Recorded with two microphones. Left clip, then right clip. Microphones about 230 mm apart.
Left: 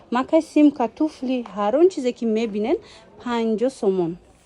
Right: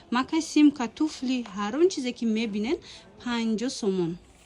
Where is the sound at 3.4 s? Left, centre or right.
Centre.